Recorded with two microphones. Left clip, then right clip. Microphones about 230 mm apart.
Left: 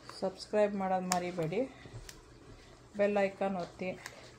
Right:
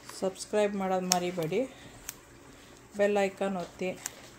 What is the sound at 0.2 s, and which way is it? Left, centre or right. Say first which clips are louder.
Speech: right 2 dB; right.